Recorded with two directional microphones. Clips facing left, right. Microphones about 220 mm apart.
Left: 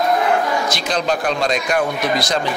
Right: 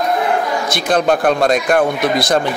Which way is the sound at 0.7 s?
55° right (ahead or behind).